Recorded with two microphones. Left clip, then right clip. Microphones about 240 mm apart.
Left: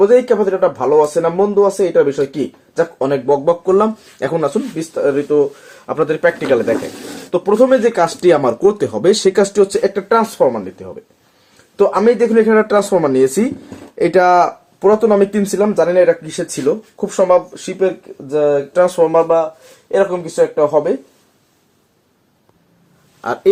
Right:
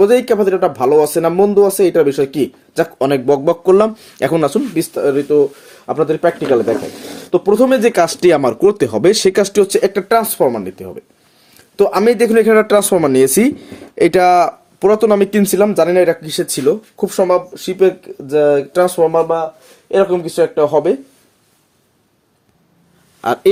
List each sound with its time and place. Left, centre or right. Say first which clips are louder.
0.0 s speech: even; right
17.3 s speech: left 1 dB; right
23.2 s speech: right 4 dB; right